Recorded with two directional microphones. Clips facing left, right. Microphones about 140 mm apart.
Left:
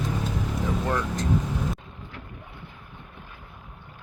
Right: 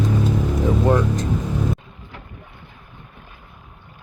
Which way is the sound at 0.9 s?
20° right (ahead or behind).